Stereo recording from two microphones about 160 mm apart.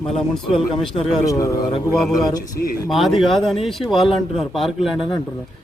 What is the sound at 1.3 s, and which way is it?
Speech, 20° left (ahead or behind).